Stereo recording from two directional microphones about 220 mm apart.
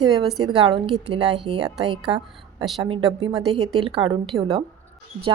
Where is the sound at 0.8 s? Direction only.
Centre (ahead or behind).